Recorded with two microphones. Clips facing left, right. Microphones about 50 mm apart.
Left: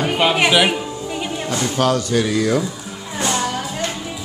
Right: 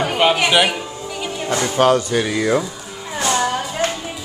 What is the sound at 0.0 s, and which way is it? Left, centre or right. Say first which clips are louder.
Music: right 1 dB; centre.